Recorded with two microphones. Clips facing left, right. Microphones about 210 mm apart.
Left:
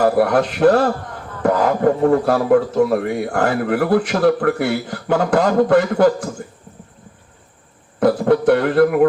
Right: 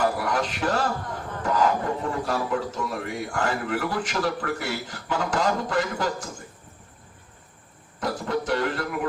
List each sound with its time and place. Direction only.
0.0 s a man's voice: 60° left (ahead or behind)
7.9 s a man's voice: 60° left (ahead or behind)